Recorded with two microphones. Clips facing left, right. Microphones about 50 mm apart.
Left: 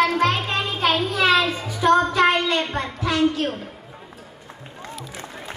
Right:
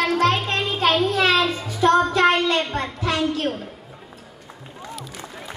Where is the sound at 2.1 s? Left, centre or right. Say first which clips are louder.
Right 1 dB; centre.